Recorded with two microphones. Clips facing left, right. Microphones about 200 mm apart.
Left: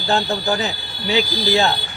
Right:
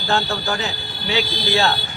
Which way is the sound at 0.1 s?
20° left (ahead or behind).